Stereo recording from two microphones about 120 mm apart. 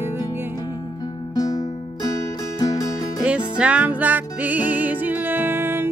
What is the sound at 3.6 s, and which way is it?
Music, 10° right (ahead or behind).